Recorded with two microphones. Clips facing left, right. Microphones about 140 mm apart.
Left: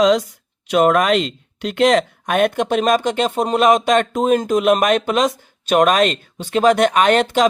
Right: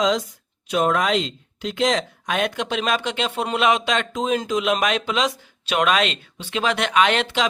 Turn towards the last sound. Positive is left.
turn(degrees=45)  # may be behind; listen again after turning